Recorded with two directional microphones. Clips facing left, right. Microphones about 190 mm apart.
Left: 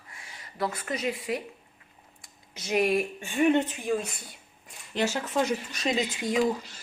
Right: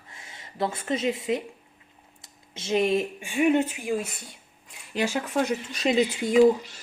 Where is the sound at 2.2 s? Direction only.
25° right (ahead or behind).